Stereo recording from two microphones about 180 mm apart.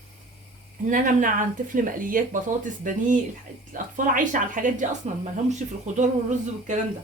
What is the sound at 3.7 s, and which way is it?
Speech, 50° right (ahead or behind).